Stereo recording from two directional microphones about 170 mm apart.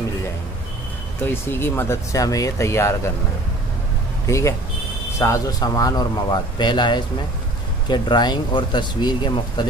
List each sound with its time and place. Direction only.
1.2 s speech: 15° left (ahead or behind)
4.3 s a man's voice: 15° left (ahead or behind)